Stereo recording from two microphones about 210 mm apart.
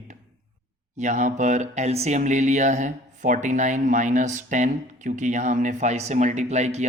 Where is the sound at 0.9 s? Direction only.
35° right (ahead or behind).